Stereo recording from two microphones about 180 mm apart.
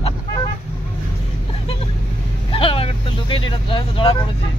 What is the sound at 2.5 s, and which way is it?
Vehicle, 30° left (ahead or behind).